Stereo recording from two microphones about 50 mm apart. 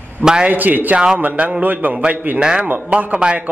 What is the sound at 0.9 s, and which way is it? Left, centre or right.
A man's voice, right.